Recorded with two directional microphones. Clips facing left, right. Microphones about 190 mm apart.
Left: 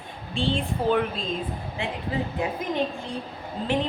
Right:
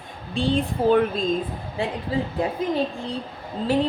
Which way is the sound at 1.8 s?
35° right (ahead or behind).